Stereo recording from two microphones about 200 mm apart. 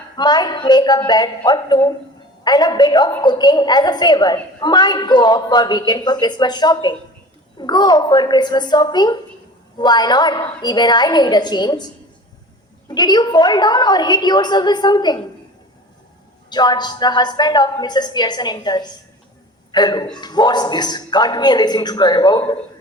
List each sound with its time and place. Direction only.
0.2 s a woman's voice: 20° left (ahead or behind)
12.9 s a woman's voice: 20° left (ahead or behind)
16.5 s a woman's voice: 20° left (ahead or behind)